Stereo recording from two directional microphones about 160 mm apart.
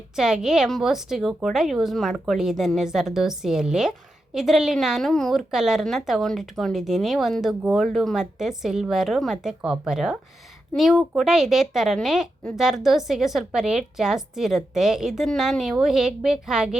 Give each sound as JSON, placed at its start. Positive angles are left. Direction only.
{"t": 0.2, "sound": "a woman's voice", "side_deg": -5}